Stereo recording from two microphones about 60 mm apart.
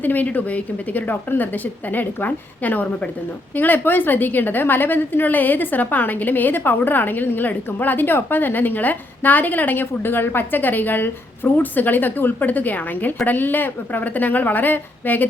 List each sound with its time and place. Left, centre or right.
0.0 s a woman's voice: left